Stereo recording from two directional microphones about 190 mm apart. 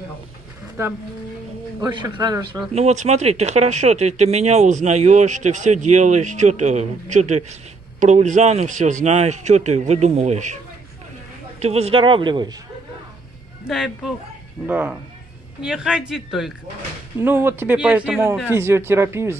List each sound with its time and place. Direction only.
1.8 s speech: 20° right (ahead or behind)
2.7 s speech: 35° right (ahead or behind)
11.6 s speech: 30° right (ahead or behind)
13.7 s a man's voice: centre (ahead or behind)